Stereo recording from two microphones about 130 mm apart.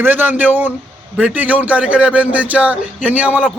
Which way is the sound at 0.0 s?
15° right (ahead or behind).